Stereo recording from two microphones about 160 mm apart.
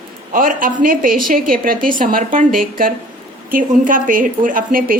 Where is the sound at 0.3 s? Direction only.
60° right (ahead or behind).